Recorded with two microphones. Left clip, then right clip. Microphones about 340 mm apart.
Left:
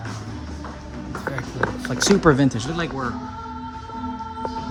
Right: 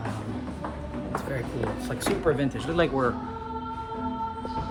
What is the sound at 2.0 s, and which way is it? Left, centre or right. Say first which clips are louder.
Speech: left 9 dB; centre.